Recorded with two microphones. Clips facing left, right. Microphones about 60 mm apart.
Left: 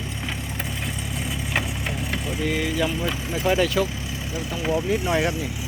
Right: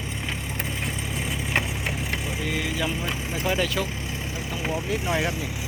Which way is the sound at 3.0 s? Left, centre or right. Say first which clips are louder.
Left 3 dB; centre.